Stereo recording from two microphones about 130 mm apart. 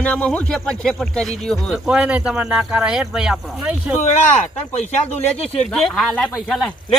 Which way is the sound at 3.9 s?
60° left (ahead or behind).